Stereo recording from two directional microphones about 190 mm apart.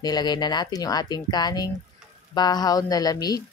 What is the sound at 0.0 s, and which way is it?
Speech, 20° left (ahead or behind).